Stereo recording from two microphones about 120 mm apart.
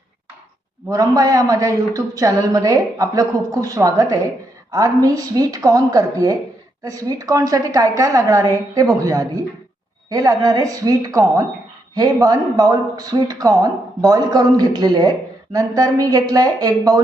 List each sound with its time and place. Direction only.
0.9 s a woman's voice: 30° right (ahead or behind)